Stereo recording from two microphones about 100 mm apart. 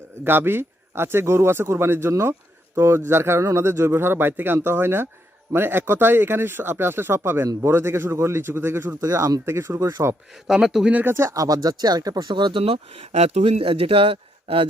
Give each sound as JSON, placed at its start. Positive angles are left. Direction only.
{"t": 0.3, "sound": "speech", "side_deg": -20}
{"t": 10.4, "sound": "speech", "side_deg": -5}
{"t": 11.0, "sound": "speech", "side_deg": -25}
{"t": 12.6, "sound": "speech", "side_deg": -80}